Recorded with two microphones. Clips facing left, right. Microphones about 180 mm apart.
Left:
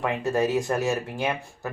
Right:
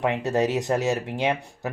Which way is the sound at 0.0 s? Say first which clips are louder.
Right 1 dB; 20° right (ahead or behind).